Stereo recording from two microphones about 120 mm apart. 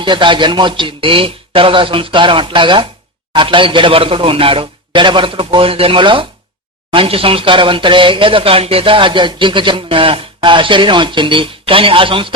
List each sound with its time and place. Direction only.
0.0 s speech: 40° right (ahead or behind)